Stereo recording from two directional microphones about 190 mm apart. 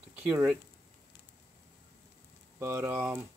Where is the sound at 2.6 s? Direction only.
10° right (ahead or behind).